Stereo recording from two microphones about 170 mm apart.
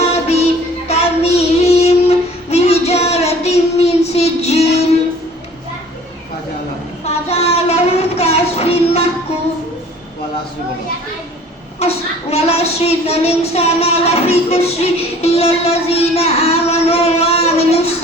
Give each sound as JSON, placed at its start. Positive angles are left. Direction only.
{"t": 0.9, "sound": "child singing", "side_deg": 35}
{"t": 7.3, "sound": "child singing", "side_deg": 40}
{"t": 11.8, "sound": "a sound", "side_deg": 35}